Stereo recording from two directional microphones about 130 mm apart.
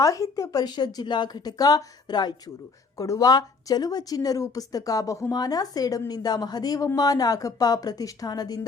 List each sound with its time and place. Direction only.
0.0 s a woman's voice: 25° left (ahead or behind)